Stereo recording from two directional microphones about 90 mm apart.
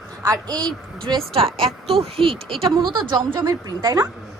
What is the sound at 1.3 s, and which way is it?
Speech, 90° right.